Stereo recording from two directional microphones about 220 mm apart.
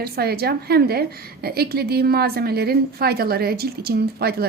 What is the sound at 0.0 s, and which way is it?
A woman's voice, 45° right (ahead or behind).